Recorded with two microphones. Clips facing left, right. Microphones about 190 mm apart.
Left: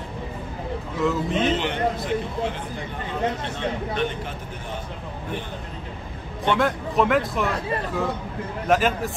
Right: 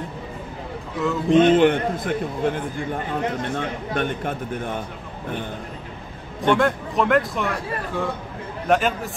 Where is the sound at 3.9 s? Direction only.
50° right (ahead or behind).